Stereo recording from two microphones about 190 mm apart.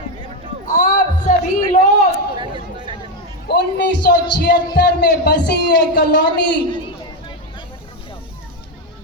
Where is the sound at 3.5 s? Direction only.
60° left (ahead or behind).